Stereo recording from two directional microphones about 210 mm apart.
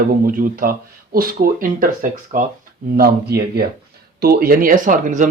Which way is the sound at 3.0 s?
50° right (ahead or behind).